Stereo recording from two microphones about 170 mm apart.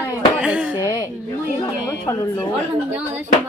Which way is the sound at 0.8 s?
25° left (ahead or behind).